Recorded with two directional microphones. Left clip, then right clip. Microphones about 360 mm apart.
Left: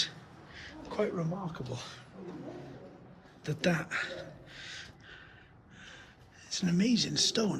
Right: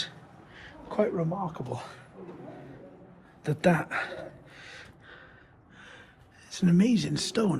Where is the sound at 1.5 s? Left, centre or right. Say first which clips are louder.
Right 5 dB; centre.